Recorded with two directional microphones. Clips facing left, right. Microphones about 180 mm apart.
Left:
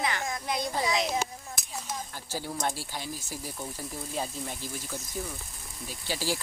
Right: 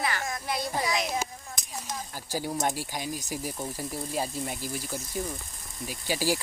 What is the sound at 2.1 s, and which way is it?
Speech, 15° right (ahead or behind).